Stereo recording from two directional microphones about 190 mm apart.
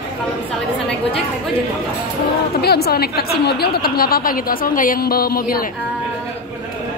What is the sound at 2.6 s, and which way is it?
A woman's voice, 55° left (ahead or behind).